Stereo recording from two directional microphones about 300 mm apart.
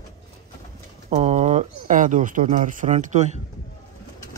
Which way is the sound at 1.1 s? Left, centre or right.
Right.